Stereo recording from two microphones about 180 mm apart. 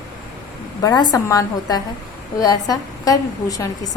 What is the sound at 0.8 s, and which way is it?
A woman's voice, 25° left (ahead or behind).